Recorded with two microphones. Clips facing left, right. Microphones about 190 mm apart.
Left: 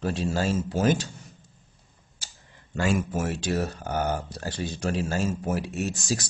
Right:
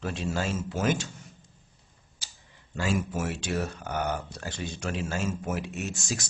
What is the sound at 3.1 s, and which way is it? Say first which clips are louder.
Speech: left 3 dB; 40° left (ahead or behind).